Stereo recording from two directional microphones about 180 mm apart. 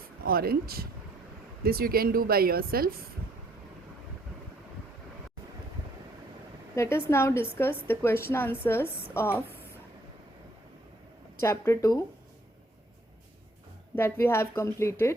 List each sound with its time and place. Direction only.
0.3 s speech: 55° right (ahead or behind)
6.7 s a woman's voice: 15° left (ahead or behind)
11.3 s a woman's voice: 15° left (ahead or behind)
13.9 s a woman's voice: 15° left (ahead or behind)